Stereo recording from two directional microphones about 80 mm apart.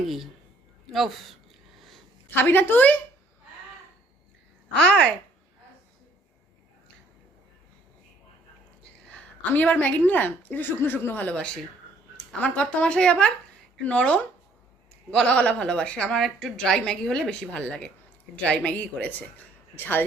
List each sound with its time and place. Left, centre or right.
0.9 s a sound: centre
2.3 s a woman's voice: left
4.8 s a woman's voice: centre
8.8 s a woman's voice: centre